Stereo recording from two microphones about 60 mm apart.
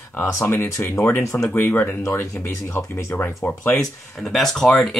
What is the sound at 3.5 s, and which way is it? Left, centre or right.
Speech, left.